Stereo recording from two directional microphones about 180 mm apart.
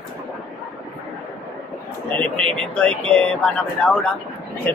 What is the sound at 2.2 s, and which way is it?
A man's voice, 5° left (ahead or behind).